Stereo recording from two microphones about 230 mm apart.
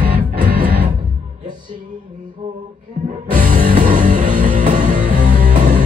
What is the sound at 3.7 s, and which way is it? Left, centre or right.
Music, right.